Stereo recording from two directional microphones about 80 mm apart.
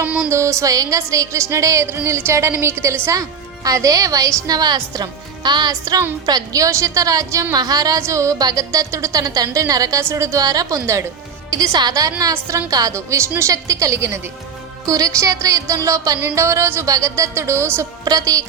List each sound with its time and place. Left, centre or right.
0.0 s a sound: centre
0.3 s music: right
3.2 s a woman's voice: right
7.5 s a woman's voice: right
10.8 s music: right
11.5 s a woman's voice: right
12.3 s music: right
18.0 s a woman's voice: right